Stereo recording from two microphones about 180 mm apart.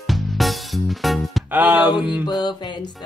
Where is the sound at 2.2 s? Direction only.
25° left (ahead or behind).